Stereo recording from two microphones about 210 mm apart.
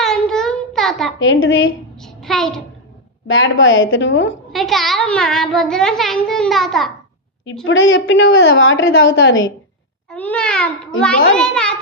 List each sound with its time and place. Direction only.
0.0 s child singing: centre (ahead or behind)
1.2 s a woman's voice: 65° left (ahead or behind)
2.0 s child singing: centre (ahead or behind)
3.2 s a woman's voice: 65° left (ahead or behind)
4.5 s a child's voice: centre (ahead or behind)
7.6 s a woman's voice: 65° left (ahead or behind)
10.1 s a child's voice: 5° left (ahead or behind)